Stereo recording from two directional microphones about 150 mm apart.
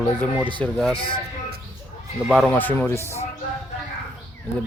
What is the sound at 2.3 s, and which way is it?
Speech, 5° left (ahead or behind).